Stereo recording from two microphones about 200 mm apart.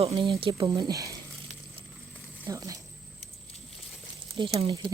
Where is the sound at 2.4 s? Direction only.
15° right (ahead or behind).